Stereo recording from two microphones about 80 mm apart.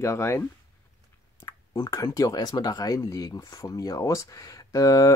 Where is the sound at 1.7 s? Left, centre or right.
Left.